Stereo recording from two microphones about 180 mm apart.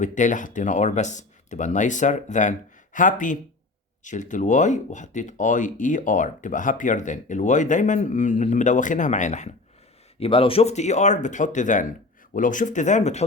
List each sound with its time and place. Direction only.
0.0 s speech: 45° left (ahead or behind)
10.2 s speech: 30° left (ahead or behind)